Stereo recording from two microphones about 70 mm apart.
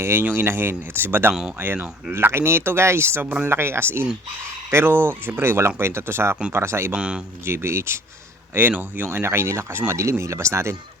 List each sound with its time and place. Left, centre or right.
0.0 s speech: right
6.9 s speech: centre
7.4 s speech: right
8.5 s speech: right